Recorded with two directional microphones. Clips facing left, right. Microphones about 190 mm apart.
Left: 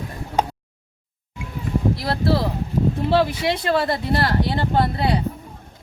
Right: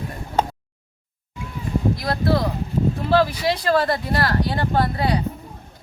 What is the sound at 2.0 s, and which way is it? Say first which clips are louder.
Speech: even; 25° left (ahead or behind).